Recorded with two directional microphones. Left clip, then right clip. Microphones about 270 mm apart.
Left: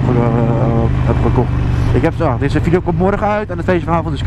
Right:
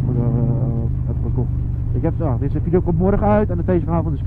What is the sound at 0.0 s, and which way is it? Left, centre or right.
Vehicle, centre.